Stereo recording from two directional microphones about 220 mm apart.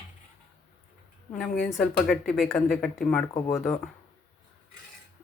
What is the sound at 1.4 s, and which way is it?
Speech, centre (ahead or behind).